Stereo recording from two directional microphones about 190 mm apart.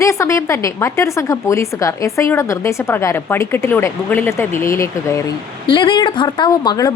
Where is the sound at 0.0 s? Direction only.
15° left (ahead or behind).